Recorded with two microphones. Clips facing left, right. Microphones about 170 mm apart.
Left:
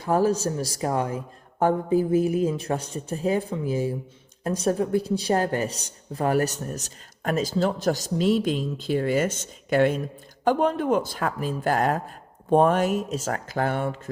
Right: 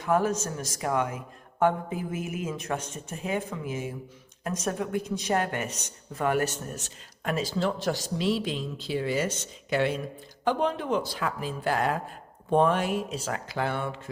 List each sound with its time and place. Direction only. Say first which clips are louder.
0.0 s speech: left 4 dB; 35° left (ahead or behind)